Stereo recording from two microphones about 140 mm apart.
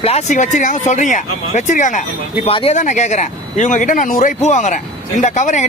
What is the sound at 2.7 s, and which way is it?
Speech, 60° left (ahead or behind).